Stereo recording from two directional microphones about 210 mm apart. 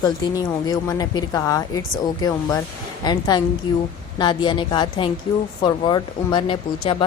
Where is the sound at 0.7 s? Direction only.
15° left (ahead or behind).